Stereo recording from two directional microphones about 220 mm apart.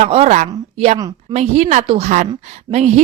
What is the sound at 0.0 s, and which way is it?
A woman's voice, 30° right (ahead or behind).